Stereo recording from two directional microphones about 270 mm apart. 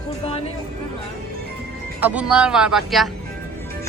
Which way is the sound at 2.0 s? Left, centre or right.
Centre.